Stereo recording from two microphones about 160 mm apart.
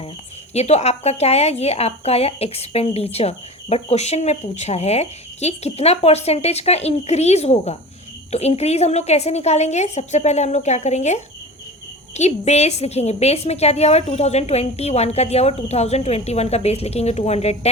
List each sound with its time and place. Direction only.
0.5 s a woman's voice: 40° left (ahead or behind)